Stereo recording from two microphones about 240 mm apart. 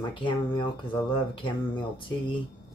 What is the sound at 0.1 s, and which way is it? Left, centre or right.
Speech, left.